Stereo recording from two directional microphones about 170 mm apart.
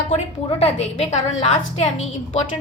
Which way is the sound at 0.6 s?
40° left (ahead or behind).